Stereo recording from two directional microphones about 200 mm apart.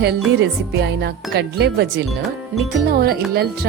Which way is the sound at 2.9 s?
50° right (ahead or behind).